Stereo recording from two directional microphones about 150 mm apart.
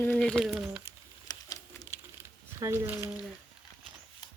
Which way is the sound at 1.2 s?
25° left (ahead or behind).